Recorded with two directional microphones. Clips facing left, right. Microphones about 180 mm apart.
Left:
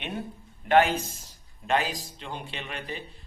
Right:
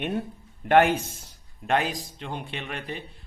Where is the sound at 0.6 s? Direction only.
55° right (ahead or behind).